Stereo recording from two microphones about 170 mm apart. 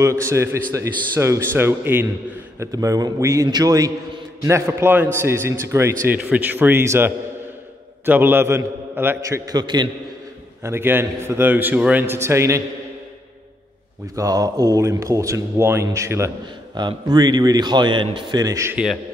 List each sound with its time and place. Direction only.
0.0 s a man's voice: 15° right (ahead or behind)
10.6 s a man's voice: 15° right (ahead or behind)
14.1 s a man's voice: 20° right (ahead or behind)